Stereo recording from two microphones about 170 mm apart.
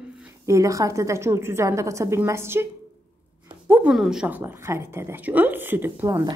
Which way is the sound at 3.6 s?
10° right (ahead or behind).